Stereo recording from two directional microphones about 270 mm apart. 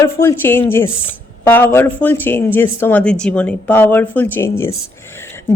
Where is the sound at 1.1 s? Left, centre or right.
Centre.